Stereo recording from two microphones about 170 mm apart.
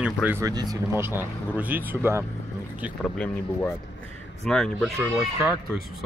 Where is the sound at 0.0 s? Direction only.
10° right (ahead or behind).